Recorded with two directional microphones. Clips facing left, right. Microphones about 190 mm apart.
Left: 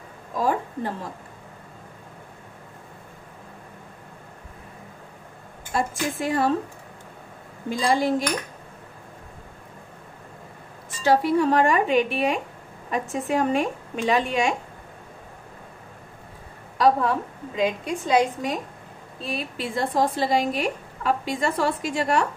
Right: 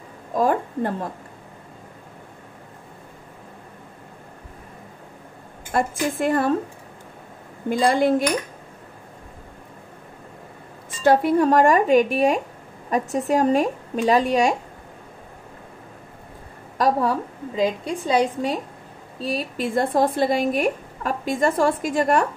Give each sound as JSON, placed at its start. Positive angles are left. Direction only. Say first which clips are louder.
{"t": 0.4, "sound": "a sound", "louder": "right 4 dB", "side_deg": -55}
{"t": 5.7, "sound": "a woman's voice", "louder": "right 3 dB", "side_deg": -55}
{"t": 7.7, "sound": "a woman's voice", "louder": "right 4 dB", "side_deg": -55}
{"t": 11.0, "sound": "a woman's voice", "louder": "right 3 dB", "side_deg": -50}
{"t": 16.7, "sound": "a woman's voice", "louder": "even", "side_deg": -45}
{"t": 19.2, "sound": "speech", "louder": "right 5 dB", "side_deg": -40}